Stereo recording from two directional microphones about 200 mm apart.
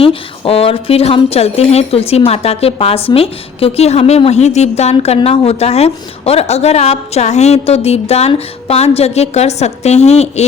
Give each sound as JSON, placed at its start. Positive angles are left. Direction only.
{"t": 0.0, "sound": "speech", "side_deg": 30}